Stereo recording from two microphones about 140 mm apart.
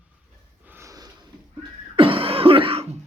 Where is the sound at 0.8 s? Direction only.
25° right (ahead or behind).